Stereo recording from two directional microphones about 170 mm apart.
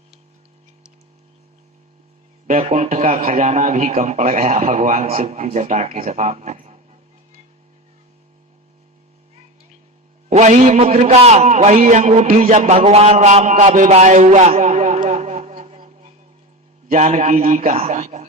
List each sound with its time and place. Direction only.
2.5 s a man's voice: 45° right (ahead or behind)
10.2 s a man's voice: 45° right (ahead or behind)